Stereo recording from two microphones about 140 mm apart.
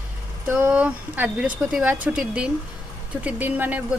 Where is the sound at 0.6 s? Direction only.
10° right (ahead or behind).